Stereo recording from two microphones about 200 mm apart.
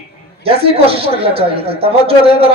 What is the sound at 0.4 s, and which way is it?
A man's voice, 30° right (ahead or behind).